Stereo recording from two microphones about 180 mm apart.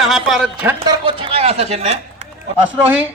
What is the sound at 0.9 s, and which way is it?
Speech, 25° right (ahead or behind).